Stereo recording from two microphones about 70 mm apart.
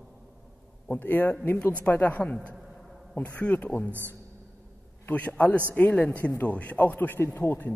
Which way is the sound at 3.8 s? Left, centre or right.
Right.